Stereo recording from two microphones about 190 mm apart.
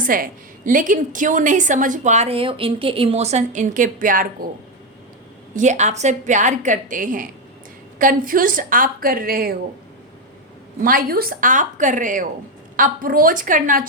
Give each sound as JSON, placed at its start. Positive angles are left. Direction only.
{"t": 0.0, "sound": "a woman's voice", "side_deg": -45}
{"t": 5.5, "sound": "a woman's voice", "side_deg": -40}
{"t": 10.8, "sound": "a woman's voice", "side_deg": -50}